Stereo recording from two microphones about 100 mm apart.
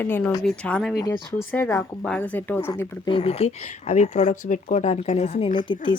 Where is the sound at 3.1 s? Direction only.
80° left.